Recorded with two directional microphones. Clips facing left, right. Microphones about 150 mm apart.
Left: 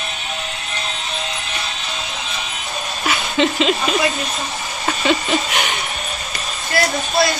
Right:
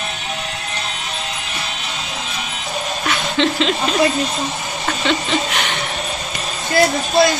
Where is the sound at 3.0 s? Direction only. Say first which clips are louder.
Left 1 dB; 5° left (ahead or behind).